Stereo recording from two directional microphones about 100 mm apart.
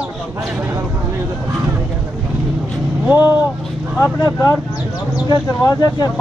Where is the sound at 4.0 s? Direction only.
35° left (ahead or behind).